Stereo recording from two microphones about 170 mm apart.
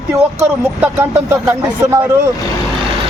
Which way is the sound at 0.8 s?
10° right (ahead or behind).